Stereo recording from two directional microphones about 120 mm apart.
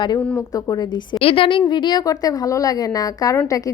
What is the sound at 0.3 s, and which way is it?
Speech, 30° left (ahead or behind).